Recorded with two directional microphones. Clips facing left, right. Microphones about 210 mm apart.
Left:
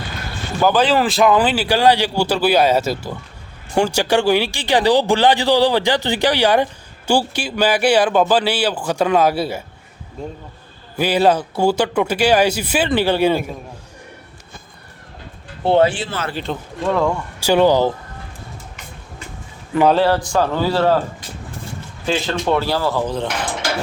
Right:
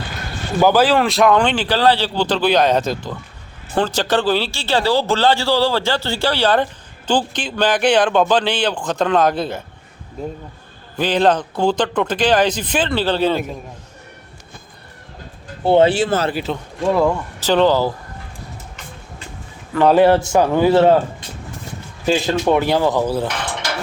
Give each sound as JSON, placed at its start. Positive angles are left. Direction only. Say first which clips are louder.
{"t": 0.6, "sound": "speech", "louder": "right 1 dB", "side_deg": -10}
{"t": 10.2, "sound": "speech", "louder": "right 2 dB", "side_deg": -5}
{"t": 10.9, "sound": "speech", "louder": "left 1 dB", "side_deg": 10}
{"t": 15.9, "sound": "speech", "louder": "right 7 dB", "side_deg": -40}
{"t": 16.3, "sound": "speech", "louder": "right 2 dB", "side_deg": -5}
{"t": 17.4, "sound": "speech", "louder": "left 1 dB", "side_deg": 10}
{"t": 19.9, "sound": "a man's voice", "louder": "right 4 dB", "side_deg": -20}
{"t": 22.0, "sound": "speech", "louder": "right 3 dB", "side_deg": -15}